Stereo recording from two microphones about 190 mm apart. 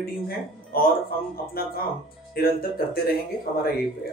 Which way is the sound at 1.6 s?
50° left (ahead or behind).